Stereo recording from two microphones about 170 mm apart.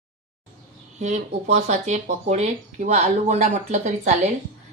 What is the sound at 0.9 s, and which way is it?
Speech, 45° right (ahead or behind).